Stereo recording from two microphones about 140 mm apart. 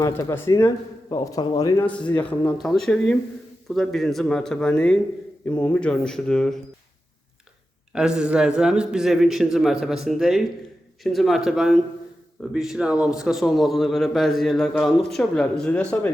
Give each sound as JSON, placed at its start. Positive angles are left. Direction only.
{"t": 0.0, "sound": "a man's voice", "side_deg": 20}
{"t": 1.8, "sound": "a man's voice", "side_deg": 10}
{"t": 7.9, "sound": "a man's voice", "side_deg": -5}